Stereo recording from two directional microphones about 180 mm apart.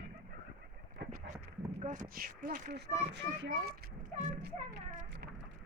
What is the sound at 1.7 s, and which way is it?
Speech, 45° right (ahead or behind).